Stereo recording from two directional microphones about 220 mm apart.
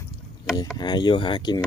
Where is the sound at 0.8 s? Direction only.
20° left (ahead or behind).